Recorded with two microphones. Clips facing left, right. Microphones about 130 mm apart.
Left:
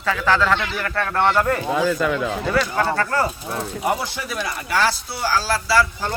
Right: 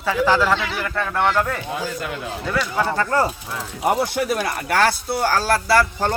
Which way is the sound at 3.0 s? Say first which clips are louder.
Right 2 dB; 20° right (ahead or behind).